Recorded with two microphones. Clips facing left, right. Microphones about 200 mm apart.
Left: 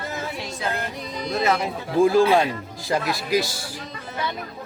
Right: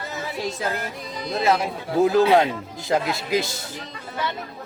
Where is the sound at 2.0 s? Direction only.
20° right (ahead or behind).